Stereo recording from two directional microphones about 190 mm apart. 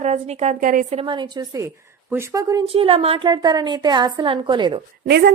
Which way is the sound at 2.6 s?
30° right (ahead or behind).